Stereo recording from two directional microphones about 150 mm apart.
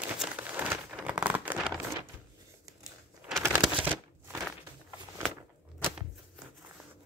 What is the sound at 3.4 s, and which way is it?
Shuffling cards, 10° right (ahead or behind).